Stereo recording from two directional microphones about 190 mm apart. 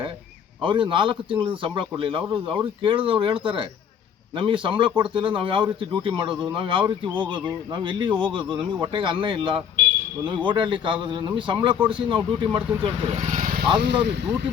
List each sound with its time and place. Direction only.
0.6 s speech: 25° right (ahead or behind); by 13.7 s 45° right (ahead or behind)
13.8 s speech: 60° right (ahead or behind)